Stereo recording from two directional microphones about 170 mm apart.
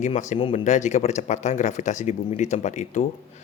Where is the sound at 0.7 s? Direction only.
45° left (ahead or behind).